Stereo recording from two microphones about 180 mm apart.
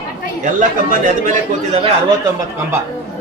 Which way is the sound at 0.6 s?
50° right (ahead or behind).